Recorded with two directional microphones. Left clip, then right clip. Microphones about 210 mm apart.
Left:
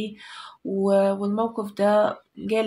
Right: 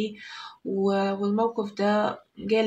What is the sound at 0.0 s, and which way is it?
Speech, 30° left (ahead or behind).